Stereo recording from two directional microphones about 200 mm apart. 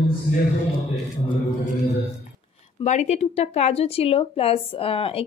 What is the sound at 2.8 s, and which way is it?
Speech, 35° left (ahead or behind).